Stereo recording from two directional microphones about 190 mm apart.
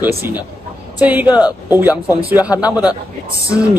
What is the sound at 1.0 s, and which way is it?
A man's voice, 10° right (ahead or behind).